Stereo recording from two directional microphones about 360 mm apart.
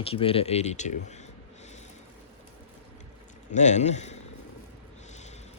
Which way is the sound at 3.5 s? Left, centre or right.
Centre.